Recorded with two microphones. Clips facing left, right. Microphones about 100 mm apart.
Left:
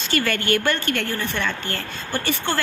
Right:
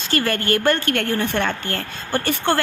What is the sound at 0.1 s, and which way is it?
A woman's voice, 40° right (ahead or behind).